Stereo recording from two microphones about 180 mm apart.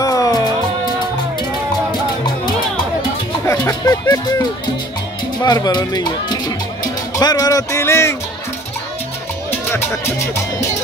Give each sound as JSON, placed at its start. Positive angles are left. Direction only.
{"t": 0.0, "sound": "music", "side_deg": 20}
{"t": 3.4, "sound": "speech", "side_deg": 20}
{"t": 9.5, "sound": "music", "side_deg": 10}